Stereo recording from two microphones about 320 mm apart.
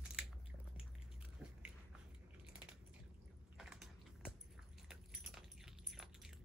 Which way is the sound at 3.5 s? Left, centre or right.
Centre.